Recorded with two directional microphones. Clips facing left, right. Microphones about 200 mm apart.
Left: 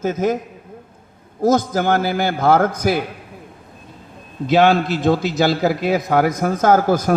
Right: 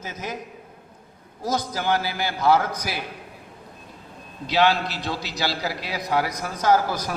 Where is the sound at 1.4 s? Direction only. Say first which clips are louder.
Left 10 dB; 50° left (ahead or behind).